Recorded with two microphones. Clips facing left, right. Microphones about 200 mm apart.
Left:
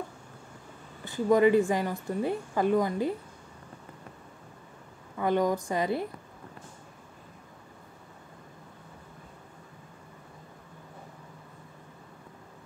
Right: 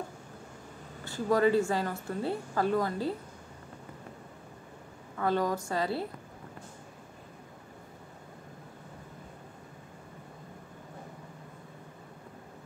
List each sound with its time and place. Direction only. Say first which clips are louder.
1.0 s a woman's voice: left 4 dB; 15° left (ahead or behind)
5.1 s a woman's voice: left 3 dB; 15° left (ahead or behind)